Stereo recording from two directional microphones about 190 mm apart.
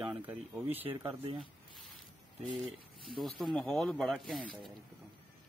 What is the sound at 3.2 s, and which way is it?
Speech, centre (ahead or behind).